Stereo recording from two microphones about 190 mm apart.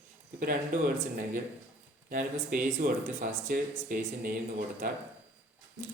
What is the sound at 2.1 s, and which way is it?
Speech, 45° right (ahead or behind).